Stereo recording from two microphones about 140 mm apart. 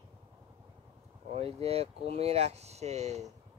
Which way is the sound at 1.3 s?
45° right (ahead or behind).